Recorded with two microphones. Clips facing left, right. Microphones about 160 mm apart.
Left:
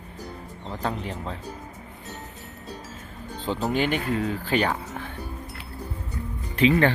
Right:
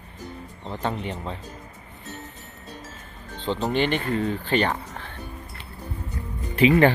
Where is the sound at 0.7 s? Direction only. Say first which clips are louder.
Right 1 dB; centre (ahead or behind).